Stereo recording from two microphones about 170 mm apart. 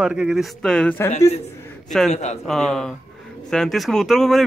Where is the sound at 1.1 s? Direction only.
40° left (ahead or behind).